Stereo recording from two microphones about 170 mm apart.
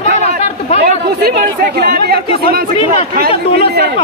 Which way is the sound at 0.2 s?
40° left (ahead or behind).